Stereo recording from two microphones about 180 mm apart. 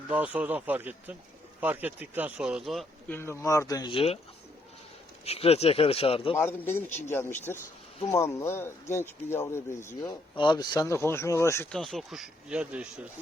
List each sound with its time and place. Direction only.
0.1 s speech: 10° right (ahead or behind)
3.1 s speech: 15° left (ahead or behind); by 4.2 s 30° left (ahead or behind)
5.2 s speech: 35° left (ahead or behind)
6.3 s speech: 10° left (ahead or behind)
11.7 s speech: centre (ahead or behind)